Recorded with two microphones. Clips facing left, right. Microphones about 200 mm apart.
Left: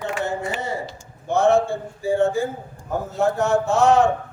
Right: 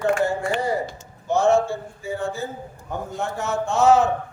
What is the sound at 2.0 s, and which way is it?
Speech, 30° left (ahead or behind).